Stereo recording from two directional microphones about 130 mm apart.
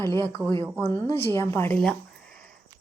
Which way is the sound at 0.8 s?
15° left (ahead or behind).